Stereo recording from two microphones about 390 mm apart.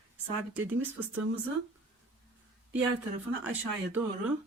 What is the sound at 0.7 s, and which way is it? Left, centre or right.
Speech, centre.